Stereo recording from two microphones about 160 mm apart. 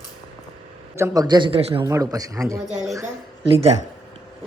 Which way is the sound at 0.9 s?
20° right (ahead or behind).